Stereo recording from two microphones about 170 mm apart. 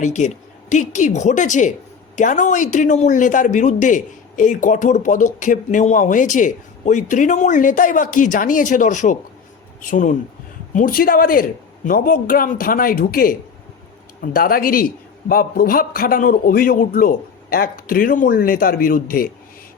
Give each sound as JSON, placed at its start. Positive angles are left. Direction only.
{"t": 0.0, "sound": "a man's voice", "side_deg": 45}